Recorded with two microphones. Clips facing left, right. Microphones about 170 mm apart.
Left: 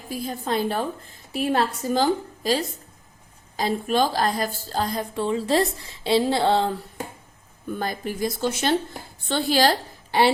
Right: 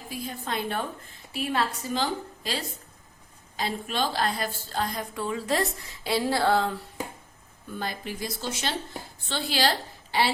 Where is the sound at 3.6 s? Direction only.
45° left (ahead or behind); by 6.7 s 25° left (ahead or behind).